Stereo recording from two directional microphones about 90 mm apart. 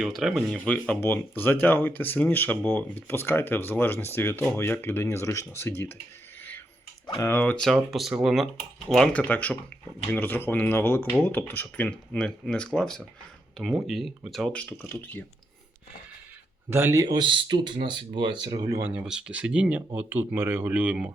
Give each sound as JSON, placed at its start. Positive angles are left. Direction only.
{"t": 0.0, "sound": "speech", "side_deg": 0}
{"t": 0.5, "sound": "speech", "side_deg": 15}
{"t": 7.2, "sound": "speech", "side_deg": 30}
{"t": 7.4, "sound": "speech", "side_deg": 10}
{"t": 9.1, "sound": "speech", "side_deg": 15}
{"t": 14.5, "sound": "speech", "side_deg": 15}
{"t": 16.6, "sound": "speech", "side_deg": -25}
{"t": 17.2, "sound": "speech", "side_deg": -65}
{"t": 18.8, "sound": "speech", "side_deg": -20}
{"t": 20.0, "sound": "speech", "side_deg": -20}